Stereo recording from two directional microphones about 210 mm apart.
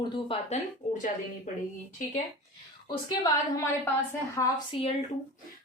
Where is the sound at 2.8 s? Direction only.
15° left (ahead or behind).